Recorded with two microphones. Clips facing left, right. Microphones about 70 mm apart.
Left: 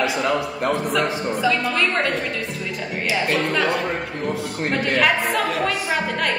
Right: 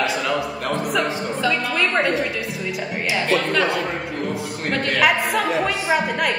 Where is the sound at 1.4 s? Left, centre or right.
Centre.